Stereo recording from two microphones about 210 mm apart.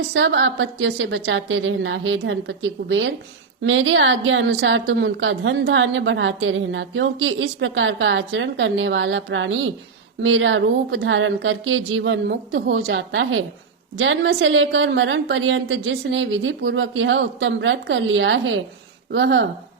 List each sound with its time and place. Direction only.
0.1 s a woman's voice: 60° right (ahead or behind)